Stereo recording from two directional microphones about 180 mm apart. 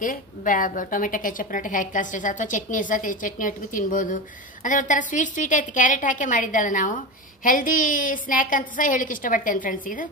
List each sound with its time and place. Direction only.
0.0 s a woman's voice: 50° left (ahead or behind)